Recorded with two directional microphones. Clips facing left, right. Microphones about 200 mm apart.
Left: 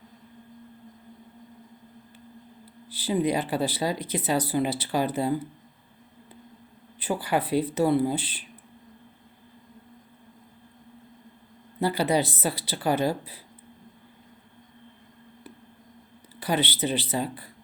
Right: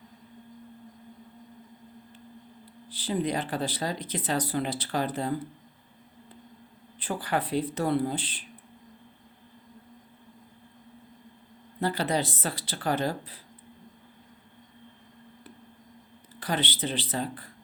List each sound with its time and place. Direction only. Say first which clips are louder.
2.9 s speech: left 4 dB; 10° left (ahead or behind)
7.0 s speech: left 3 dB; 10° left (ahead or behind)
11.8 s speech: left 4 dB; 10° left (ahead or behind)
16.4 s speech: left 4 dB; 10° left (ahead or behind)